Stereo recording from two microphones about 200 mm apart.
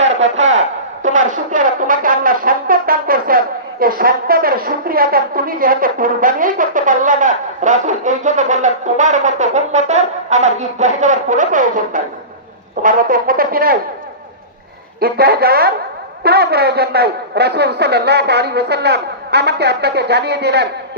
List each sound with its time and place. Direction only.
0.0 s a sound: 35° right (ahead or behind)
1.0 s speech: 40° right (ahead or behind)
15.0 s a man's voice: 50° right (ahead or behind)